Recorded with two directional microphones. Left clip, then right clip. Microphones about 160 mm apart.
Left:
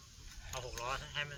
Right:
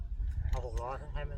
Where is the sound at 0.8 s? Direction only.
35° right (ahead or behind).